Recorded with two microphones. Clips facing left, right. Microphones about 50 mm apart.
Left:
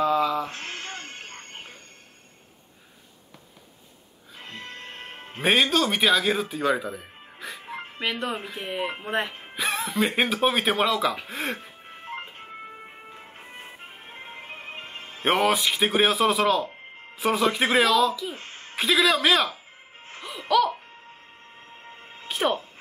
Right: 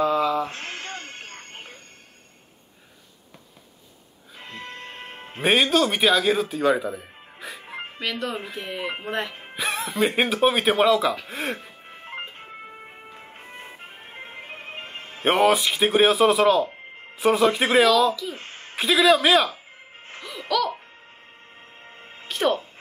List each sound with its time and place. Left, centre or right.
0.0 s a sound: centre
0.5 s a sound: right
4.4 s music: centre
8.0 s speech: left
9.3 s speech: centre
11.2 s music: centre
13.2 s music: centre
14.9 s a man's voice: centre
18.4 s a sound: right
18.8 s a man's voice: centre
20.2 s music: centre
21.8 s music: centre
22.3 s music: centre